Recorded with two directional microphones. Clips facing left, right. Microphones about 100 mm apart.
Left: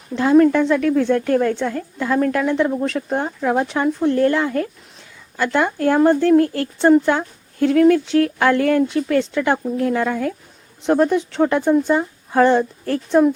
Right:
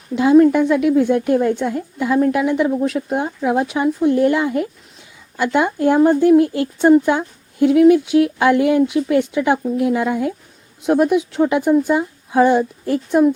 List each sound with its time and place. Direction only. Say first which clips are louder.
0.1 s speech: right 2 dB; 10° right (ahead or behind)